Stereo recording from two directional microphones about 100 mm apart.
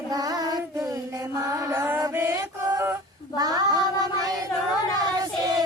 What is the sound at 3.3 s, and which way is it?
Child singing, 40° right (ahead or behind).